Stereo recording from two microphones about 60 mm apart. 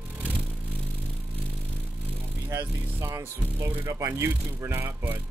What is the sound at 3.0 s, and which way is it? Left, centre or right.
Speech, right.